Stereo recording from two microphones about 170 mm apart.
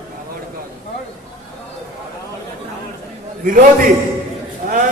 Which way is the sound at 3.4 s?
55° right (ahead or behind).